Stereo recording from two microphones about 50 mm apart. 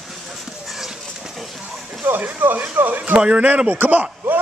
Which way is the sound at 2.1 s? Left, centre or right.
Right.